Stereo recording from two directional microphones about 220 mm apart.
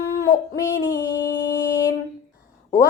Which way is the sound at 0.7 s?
45° left (ahead or behind).